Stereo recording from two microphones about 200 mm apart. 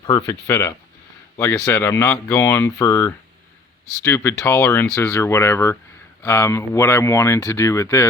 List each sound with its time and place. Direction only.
0.0 s speech: 20° left (ahead or behind)